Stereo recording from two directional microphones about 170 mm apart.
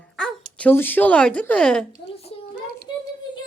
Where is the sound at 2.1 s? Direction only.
35° left (ahead or behind).